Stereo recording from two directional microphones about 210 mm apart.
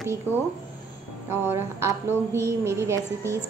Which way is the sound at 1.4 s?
10° right (ahead or behind).